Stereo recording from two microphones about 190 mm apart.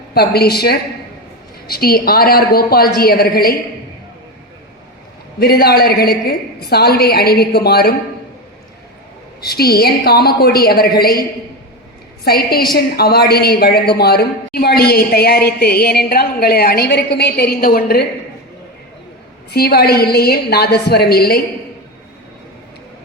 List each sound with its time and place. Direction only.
0.1 s a woman's voice: 55° left (ahead or behind)
5.4 s speech: 55° left (ahead or behind)
9.5 s speech: 55° left (ahead or behind)
19.5 s speech: 55° left (ahead or behind)